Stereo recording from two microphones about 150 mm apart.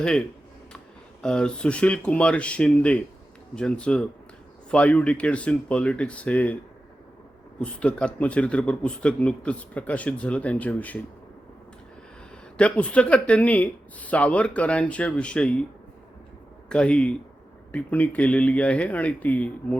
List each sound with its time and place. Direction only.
1.2 s speech: 5° left (ahead or behind)
7.6 s speech: 10° left (ahead or behind)
12.5 s speech: 10° left (ahead or behind)
16.6 s speech: 5° left (ahead or behind)